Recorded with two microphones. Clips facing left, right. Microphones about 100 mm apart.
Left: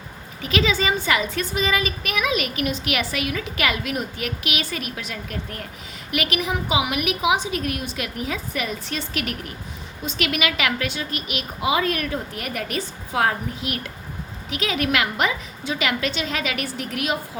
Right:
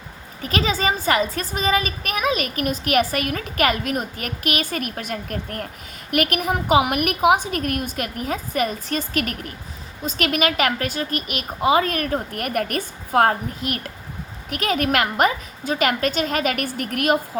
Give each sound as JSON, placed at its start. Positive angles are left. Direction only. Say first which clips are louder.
{"t": 0.4, "sound": "a woman's voice", "louder": "even", "side_deg": -40}